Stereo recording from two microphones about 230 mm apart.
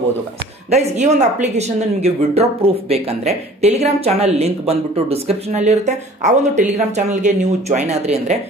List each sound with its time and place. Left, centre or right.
0.7 s speech: right